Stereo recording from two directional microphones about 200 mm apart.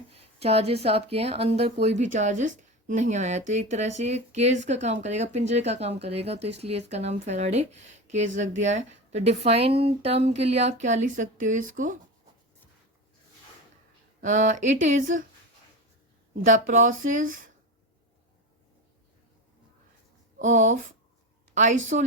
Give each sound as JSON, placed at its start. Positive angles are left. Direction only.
{"t": 0.1, "sound": "a woman's voice", "side_deg": -30}
{"t": 14.2, "sound": "a woman's voice", "side_deg": -40}
{"t": 16.3, "sound": "a woman's voice", "side_deg": -40}
{"t": 20.4, "sound": "a woman's voice", "side_deg": -40}